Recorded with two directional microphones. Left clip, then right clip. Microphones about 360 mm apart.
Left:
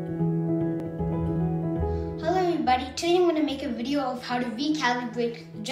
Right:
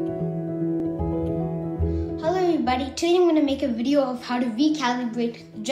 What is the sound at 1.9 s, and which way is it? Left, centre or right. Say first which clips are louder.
A child's voice: right 3 dB; centre.